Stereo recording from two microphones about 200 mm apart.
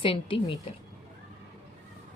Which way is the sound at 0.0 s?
25° left (ahead or behind).